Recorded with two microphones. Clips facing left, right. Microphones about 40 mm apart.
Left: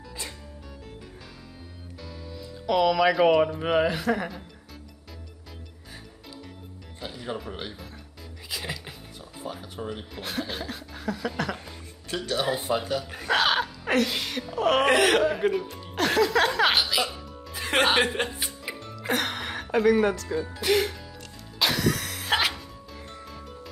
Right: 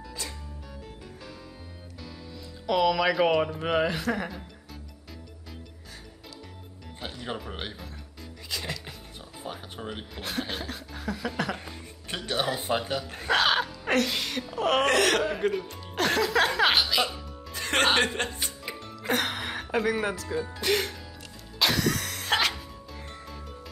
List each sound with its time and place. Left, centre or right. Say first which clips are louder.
2.6 s speech: left 2 dB; centre
8.5 s music: even; centre
9.4 s music: left 2 dB; right
10.1 s speech: right 1 dB; centre
12.1 s speech: left 2 dB; right
13.3 s speech: left 1 dB; centre
21.5 s music: left 1 dB; centre